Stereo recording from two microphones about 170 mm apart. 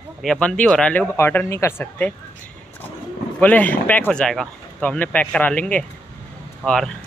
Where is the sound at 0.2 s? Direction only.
5° left (ahead or behind).